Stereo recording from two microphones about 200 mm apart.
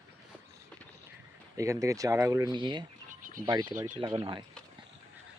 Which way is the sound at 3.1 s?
40° right (ahead or behind).